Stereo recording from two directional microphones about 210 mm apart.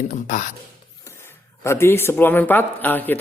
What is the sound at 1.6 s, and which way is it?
A man's voice, 10° left (ahead or behind).